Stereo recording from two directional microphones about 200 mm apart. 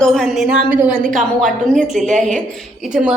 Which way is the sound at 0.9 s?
40° right (ahead or behind).